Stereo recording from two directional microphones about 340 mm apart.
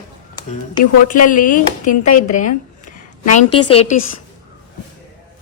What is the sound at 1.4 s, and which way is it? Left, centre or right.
Speech, left.